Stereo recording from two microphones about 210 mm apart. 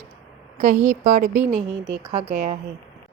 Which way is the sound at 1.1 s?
35° right (ahead or behind).